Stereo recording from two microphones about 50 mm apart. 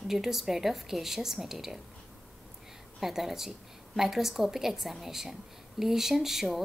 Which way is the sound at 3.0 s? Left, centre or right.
Centre.